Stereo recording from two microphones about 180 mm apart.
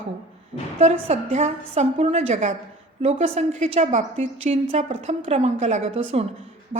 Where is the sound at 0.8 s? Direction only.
40° right (ahead or behind).